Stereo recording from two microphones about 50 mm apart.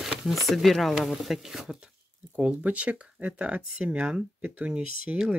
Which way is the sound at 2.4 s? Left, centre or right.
Right.